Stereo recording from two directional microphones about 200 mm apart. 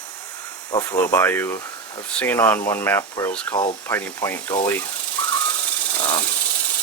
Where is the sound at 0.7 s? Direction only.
20° left (ahead or behind).